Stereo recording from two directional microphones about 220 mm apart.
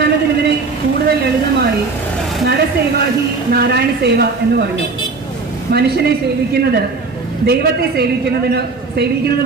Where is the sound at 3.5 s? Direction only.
45° right (ahead or behind).